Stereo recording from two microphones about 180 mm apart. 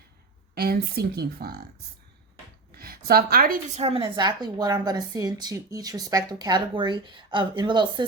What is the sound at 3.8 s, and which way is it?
A woman's voice, 30° right (ahead or behind).